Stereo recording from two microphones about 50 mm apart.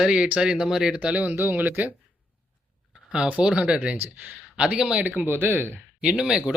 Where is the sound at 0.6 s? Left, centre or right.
Centre.